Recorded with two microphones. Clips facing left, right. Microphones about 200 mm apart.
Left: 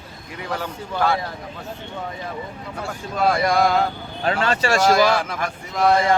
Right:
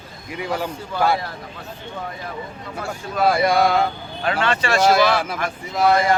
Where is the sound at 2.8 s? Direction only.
5° right (ahead or behind).